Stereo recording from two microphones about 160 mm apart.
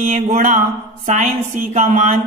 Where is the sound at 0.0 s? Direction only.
50° right (ahead or behind).